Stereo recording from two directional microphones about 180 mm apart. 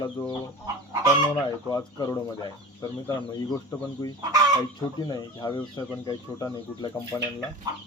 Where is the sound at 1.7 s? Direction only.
20° left (ahead or behind).